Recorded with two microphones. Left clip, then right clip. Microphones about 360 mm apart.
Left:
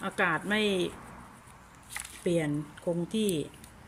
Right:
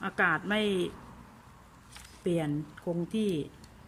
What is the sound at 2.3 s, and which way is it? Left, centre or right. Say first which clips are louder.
Speech: left 2 dB; centre.